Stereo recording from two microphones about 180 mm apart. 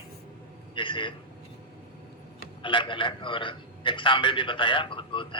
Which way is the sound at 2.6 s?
25° left (ahead or behind).